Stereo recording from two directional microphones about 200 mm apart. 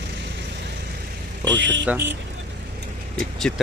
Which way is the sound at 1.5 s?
65° right (ahead or behind).